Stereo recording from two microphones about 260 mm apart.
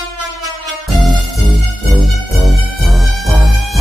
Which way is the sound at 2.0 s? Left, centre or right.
Centre.